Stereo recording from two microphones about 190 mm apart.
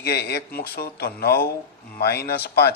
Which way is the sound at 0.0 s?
55° left (ahead or behind).